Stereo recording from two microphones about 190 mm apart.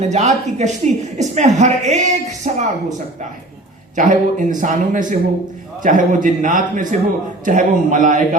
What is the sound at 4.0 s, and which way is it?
A man's voice, 40° right (ahead or behind).